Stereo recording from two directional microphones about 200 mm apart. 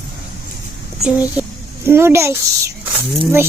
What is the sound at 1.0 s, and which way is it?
A child's voice, 10° right (ahead or behind).